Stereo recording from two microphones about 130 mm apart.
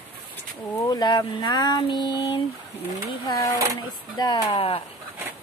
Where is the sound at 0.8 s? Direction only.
35° left (ahead or behind).